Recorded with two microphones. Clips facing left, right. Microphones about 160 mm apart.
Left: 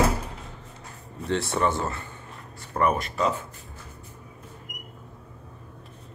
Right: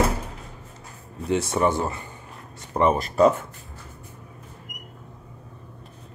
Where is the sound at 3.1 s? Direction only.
50° right (ahead or behind).